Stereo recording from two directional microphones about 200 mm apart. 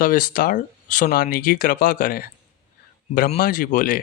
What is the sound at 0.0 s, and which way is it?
Speech, 45° left (ahead or behind).